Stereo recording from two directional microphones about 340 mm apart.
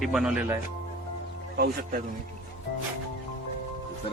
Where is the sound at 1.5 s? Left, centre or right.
Right.